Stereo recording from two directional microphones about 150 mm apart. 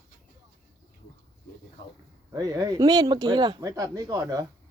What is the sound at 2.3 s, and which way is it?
Speech, 25° right (ahead or behind).